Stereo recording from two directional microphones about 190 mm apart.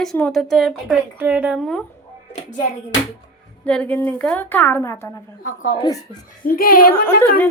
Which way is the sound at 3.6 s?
5° left (ahead or behind).